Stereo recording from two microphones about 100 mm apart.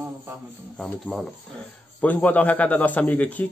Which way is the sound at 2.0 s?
15° left (ahead or behind).